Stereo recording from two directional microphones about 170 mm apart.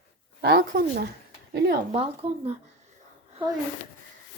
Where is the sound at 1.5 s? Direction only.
75° right (ahead or behind).